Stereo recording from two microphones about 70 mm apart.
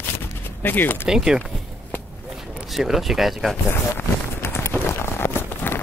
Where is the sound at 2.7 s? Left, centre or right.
Centre.